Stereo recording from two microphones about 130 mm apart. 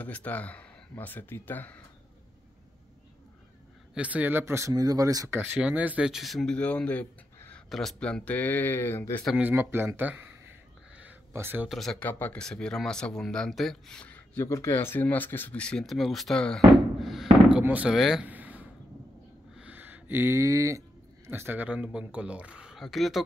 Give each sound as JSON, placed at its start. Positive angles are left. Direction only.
{"t": 0.0, "sound": "speech", "side_deg": 10}
{"t": 3.9, "sound": "speech", "side_deg": -10}
{"t": 5.4, "sound": "speech", "side_deg": -10}
{"t": 9.4, "sound": "speech", "side_deg": -15}
{"t": 11.0, "sound": "a sound", "side_deg": -15}
{"t": 11.7, "sound": "speech", "side_deg": 0}
{"t": 12.0, "sound": "speech", "side_deg": 15}
{"t": 14.4, "sound": "speech", "side_deg": 20}
{"t": 18.2, "sound": "a sound", "side_deg": -10}
{"t": 21.3, "sound": "speech", "side_deg": -15}